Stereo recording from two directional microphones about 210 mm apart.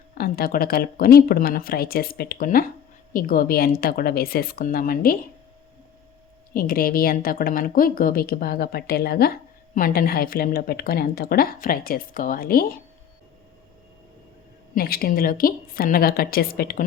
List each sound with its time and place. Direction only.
0.1 s a woman's voice: 45° left (ahead or behind)
6.5 s a woman's voice: 45° left (ahead or behind)
14.8 s a woman's voice: 45° left (ahead or behind)